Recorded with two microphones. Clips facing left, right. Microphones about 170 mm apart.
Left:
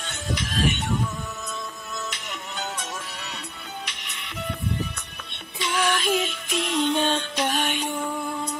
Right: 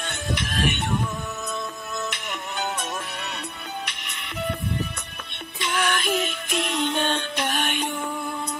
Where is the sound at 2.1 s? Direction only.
60° right (ahead or behind).